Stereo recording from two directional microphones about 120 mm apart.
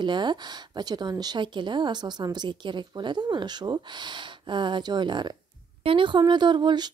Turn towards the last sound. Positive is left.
turn(degrees=-40)  # may be behind; listen again after turning